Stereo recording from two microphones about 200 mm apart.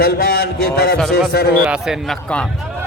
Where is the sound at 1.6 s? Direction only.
Centre (ahead or behind).